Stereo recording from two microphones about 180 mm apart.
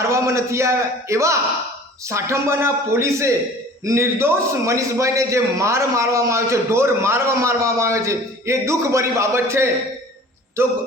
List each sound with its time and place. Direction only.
0.1 s a man's voice: 15° right (ahead or behind)